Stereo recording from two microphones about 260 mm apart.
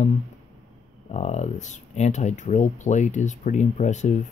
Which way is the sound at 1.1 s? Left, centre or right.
Left.